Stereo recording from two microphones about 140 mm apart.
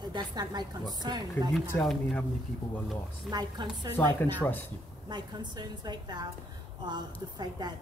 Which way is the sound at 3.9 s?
15° left (ahead or behind).